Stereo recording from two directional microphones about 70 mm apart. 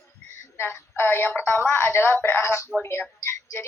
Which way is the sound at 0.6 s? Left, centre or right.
Left.